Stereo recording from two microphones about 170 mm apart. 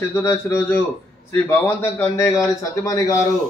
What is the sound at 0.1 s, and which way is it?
A man's voice, 15° left (ahead or behind).